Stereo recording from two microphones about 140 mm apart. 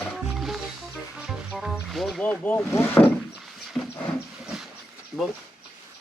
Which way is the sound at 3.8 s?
5° left (ahead or behind).